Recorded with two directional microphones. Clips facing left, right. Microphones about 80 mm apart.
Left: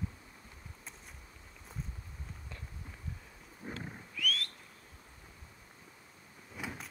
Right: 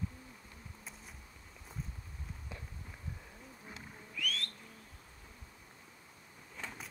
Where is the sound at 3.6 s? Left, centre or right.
Left.